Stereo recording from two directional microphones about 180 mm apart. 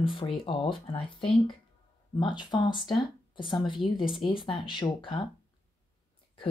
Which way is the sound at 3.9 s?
25° left (ahead or behind).